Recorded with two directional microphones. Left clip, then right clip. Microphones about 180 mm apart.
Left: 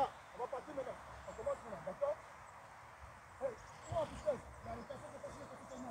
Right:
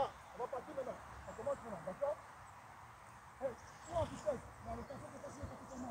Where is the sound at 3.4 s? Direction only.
45° left (ahead or behind).